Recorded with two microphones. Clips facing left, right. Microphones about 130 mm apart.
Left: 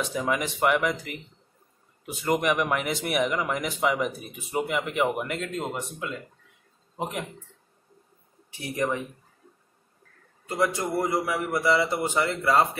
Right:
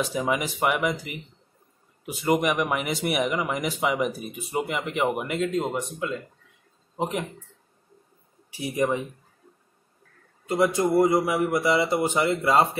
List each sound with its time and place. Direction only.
0.0 s speech: 5° right (ahead or behind)
8.5 s a sound: 10° right (ahead or behind)
8.7 s a man's voice: 20° right (ahead or behind)
10.4 s a man's voice: 20° right (ahead or behind)